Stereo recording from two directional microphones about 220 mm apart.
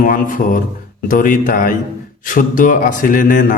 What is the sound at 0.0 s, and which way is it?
A man's voice, 40° left (ahead or behind).